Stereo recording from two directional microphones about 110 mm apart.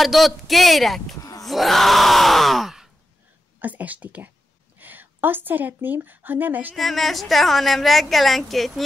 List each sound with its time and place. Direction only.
0.0 s a woman's voice: centre (ahead or behind)
3.5 s a woman's voice: 15° right (ahead or behind)
6.7 s a woman's voice: centre (ahead or behind)